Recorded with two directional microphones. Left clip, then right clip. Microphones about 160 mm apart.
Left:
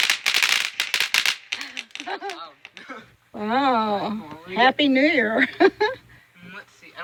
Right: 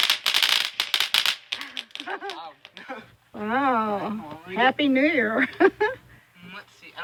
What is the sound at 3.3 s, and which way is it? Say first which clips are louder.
Speech: left 2 dB; 25° left (ahead or behind).